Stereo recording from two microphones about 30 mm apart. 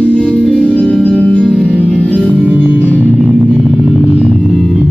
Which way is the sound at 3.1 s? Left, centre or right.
Centre.